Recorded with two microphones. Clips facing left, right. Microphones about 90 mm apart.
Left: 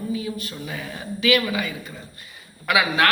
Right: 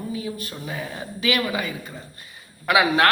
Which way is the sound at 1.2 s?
40° right (ahead or behind).